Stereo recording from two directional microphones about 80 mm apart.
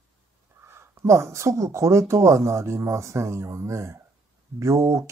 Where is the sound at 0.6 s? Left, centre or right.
Right.